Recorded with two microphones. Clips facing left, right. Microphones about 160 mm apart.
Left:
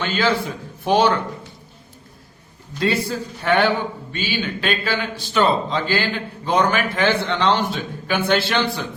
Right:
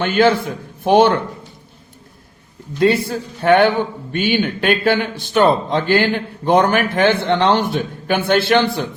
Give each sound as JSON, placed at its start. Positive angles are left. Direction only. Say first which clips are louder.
{"t": 0.0, "sound": "a man's voice", "louder": "right 6 dB", "side_deg": -55}
{"t": 2.7, "sound": "a man's voice", "louder": "right 6 dB", "side_deg": -55}